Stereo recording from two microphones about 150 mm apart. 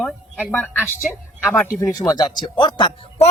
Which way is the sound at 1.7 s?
25° left (ahead or behind).